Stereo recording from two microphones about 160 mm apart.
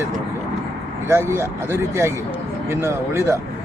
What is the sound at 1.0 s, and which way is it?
Speech, 15° right (ahead or behind).